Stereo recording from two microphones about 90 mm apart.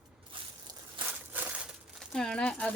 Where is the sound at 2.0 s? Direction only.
5° left (ahead or behind).